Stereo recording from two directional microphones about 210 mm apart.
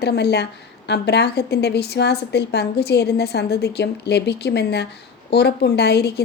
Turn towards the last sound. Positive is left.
turn(degrees=50)  # may be behind; listen again after turning